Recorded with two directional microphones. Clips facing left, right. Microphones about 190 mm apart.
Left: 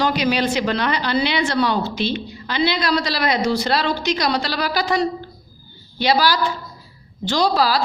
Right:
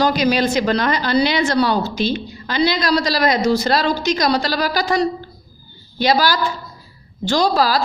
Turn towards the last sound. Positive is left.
turn(degrees=-45)  # may be behind; listen again after turning